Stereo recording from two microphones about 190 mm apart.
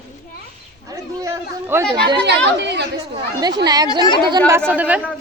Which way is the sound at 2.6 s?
65° right (ahead or behind).